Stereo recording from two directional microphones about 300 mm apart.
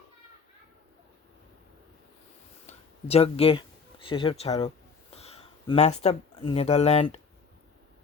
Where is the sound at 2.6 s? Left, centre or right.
Centre.